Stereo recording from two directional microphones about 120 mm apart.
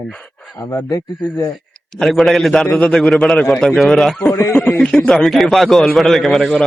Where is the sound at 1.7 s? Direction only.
5° left (ahead or behind).